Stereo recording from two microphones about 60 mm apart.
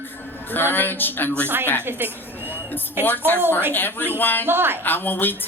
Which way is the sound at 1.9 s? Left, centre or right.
Right.